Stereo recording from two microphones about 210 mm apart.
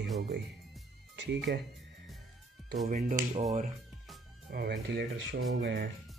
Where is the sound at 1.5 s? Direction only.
50° right (ahead or behind).